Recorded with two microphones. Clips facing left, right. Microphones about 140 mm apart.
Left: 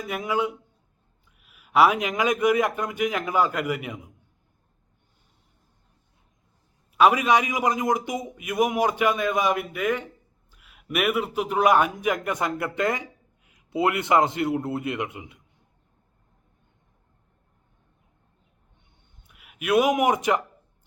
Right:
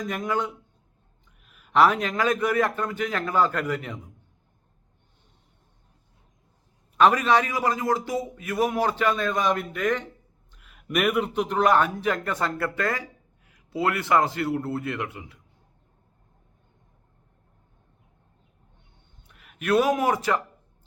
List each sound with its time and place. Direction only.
0.0 s a man's voice: 10° left (ahead or behind)
6.9 s a man's voice: 10° left (ahead or behind)
19.3 s a man's voice: 10° left (ahead or behind)